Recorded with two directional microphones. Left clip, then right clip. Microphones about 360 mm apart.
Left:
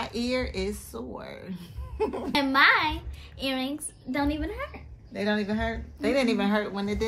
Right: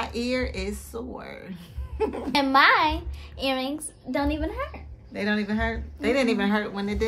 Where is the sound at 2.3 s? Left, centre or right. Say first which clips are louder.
Right 2 dB; centre.